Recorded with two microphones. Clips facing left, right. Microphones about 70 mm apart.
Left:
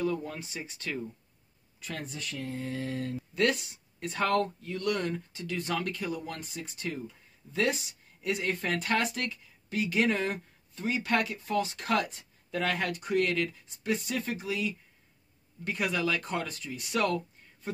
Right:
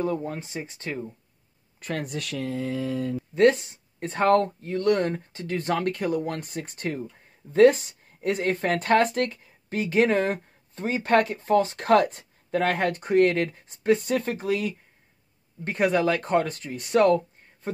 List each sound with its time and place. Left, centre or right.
0.0 s speech: right
1.8 s speech: right
3.3 s speech: right